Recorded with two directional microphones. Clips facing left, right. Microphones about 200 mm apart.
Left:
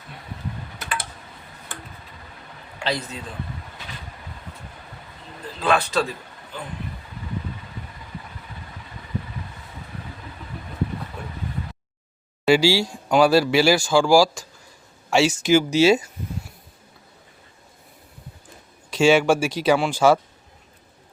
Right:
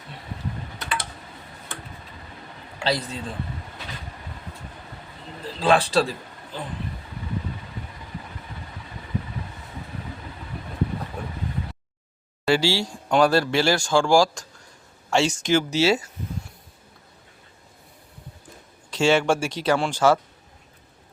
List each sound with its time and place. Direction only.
2.8 s a man's voice: 35° right (ahead or behind)
5.5 s a man's voice: 30° right (ahead or behind)
12.5 s speech: 10° left (ahead or behind)
18.9 s speech: 10° left (ahead or behind)